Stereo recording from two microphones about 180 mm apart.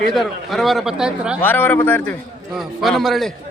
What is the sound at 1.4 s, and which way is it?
Speech, 10° left (ahead or behind).